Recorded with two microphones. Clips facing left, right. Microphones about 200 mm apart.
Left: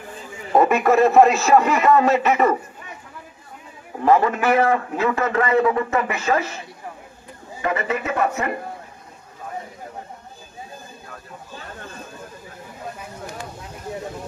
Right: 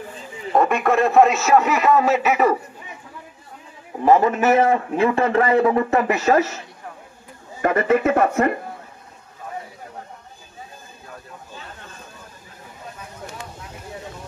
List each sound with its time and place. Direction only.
0.6 s a man's voice: 5° left (ahead or behind)
4.0 s a man's voice: 20° right (ahead or behind); by 6.6 s 40° right (ahead or behind)
7.6 s speech: 50° right (ahead or behind)